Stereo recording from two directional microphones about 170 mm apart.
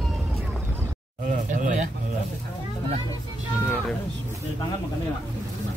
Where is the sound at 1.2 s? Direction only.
50° right (ahead or behind).